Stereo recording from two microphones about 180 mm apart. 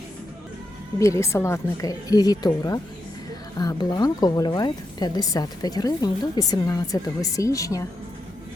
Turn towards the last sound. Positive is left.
turn(degrees=20)  # may be behind; listen again after turning